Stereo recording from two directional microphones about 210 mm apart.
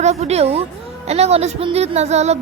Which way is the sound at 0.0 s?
30° right (ahead or behind).